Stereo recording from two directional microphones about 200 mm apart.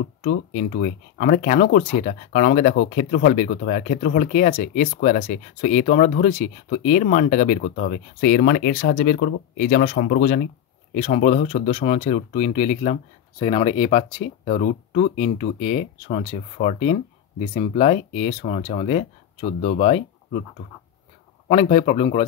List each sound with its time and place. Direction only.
0.2 s speech: 50° left (ahead or behind); by 20.4 s 30° left (ahead or behind)
21.5 s speech: 30° left (ahead or behind)